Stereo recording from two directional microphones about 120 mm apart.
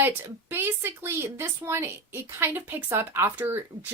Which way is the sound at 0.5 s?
20° right (ahead or behind).